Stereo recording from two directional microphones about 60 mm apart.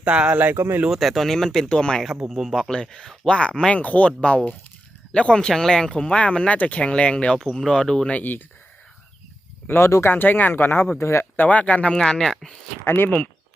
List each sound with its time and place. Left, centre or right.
0.0 s speech: centre
0.5 s speech: right
0.9 s speech: centre
2.3 s speech: centre
8.1 s speech: left
9.6 s speech: left
10.9 s speech: left
11.3 s speech: left
11.9 s speech: centre
12.8 s speech: left